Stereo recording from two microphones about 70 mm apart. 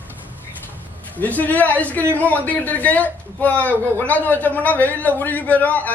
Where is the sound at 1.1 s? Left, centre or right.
Left.